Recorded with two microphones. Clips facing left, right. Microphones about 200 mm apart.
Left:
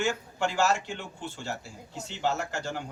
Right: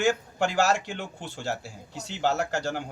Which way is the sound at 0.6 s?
80° right.